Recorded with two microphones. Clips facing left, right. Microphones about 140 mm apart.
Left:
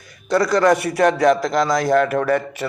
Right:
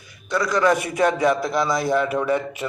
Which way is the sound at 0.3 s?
35° left (ahead or behind).